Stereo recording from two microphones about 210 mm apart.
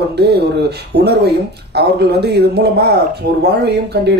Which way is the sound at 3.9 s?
50° right (ahead or behind).